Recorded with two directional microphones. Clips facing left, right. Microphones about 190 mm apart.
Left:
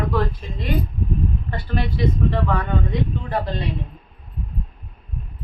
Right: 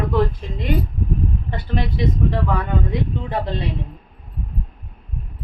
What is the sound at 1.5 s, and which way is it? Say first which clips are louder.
Speech: right 1 dB; 20° right (ahead or behind).